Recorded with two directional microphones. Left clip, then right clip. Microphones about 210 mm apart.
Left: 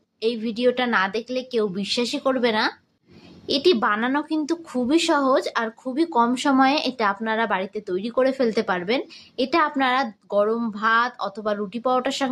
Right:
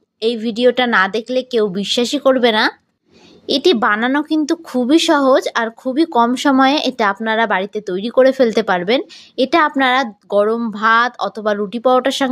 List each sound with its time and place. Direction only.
0.2 s a woman's voice: 35° right (ahead or behind)